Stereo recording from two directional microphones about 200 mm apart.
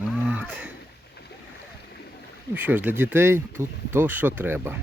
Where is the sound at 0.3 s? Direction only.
5° right (ahead or behind).